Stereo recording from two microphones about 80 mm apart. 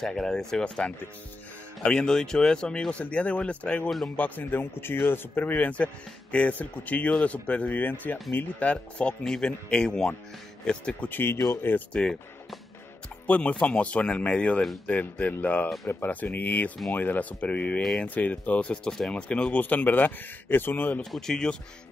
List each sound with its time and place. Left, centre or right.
0.0 s speech: centre
4.2 s speech: left; by 11.0 s centre
11.0 s speech: left
11.9 s speech: centre; by 21.0 s left
21.0 s speech: centre